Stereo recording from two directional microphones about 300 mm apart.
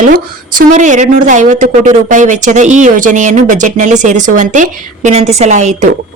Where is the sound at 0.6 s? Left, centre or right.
Right.